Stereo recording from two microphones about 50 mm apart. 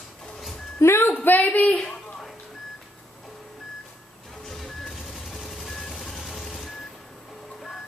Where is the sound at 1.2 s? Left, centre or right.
Left.